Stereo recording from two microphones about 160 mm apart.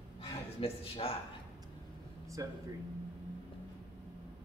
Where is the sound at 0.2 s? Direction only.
35° left (ahead or behind).